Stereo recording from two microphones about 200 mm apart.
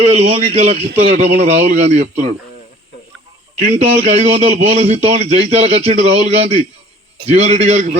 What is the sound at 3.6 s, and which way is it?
A man's voice, 35° right (ahead or behind).